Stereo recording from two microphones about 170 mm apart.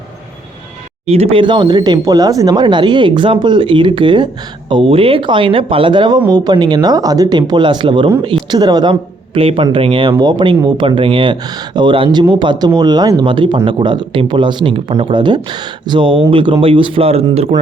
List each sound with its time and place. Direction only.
1.0 s speech: 35° right (ahead or behind)